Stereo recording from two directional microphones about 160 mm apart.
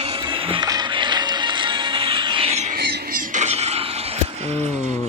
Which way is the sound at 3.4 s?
40° right (ahead or behind).